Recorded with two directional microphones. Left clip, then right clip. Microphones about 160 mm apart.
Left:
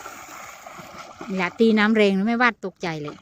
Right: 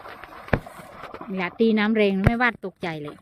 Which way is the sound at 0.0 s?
Centre (ahead or behind).